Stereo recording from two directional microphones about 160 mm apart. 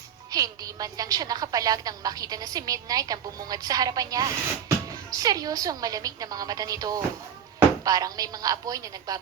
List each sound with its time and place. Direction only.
0.3 s a woman's voice: 25° right (ahead or behind)